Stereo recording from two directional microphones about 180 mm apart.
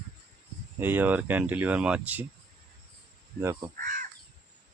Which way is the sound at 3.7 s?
50° right (ahead or behind).